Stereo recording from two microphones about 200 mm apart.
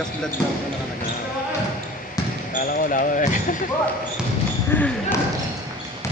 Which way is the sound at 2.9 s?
40° left (ahead or behind).